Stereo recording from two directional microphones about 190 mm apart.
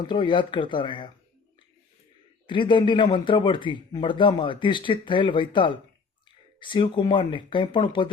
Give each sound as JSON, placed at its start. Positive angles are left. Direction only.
{"t": 0.0, "sound": "a man's voice", "side_deg": 25}
{"t": 2.5, "sound": "a man's voice", "side_deg": 25}